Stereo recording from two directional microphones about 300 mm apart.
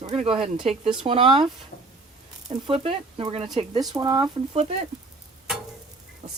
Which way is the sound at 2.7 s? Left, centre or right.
Centre.